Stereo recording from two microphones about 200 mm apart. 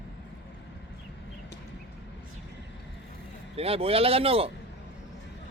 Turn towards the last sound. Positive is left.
turn(degrees=-30)  # may be behind; listen again after turning